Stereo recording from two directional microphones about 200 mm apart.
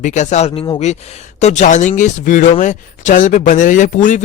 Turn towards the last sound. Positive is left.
turn(degrees=40)  # may be behind; listen again after turning